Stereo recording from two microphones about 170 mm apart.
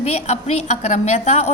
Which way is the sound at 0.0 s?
40° left (ahead or behind).